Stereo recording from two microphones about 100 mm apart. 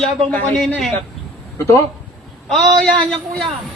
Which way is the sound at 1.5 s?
30° left (ahead or behind).